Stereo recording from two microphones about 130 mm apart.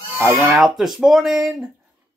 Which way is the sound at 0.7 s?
Centre (ahead or behind).